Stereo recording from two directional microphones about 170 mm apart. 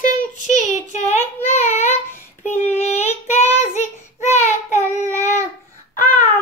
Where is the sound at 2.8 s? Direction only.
40° left (ahead or behind).